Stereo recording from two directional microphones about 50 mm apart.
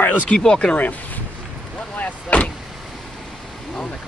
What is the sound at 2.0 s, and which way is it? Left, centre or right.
Speech, left.